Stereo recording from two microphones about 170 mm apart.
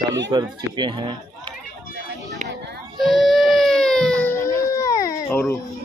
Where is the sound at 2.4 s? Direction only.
85° right.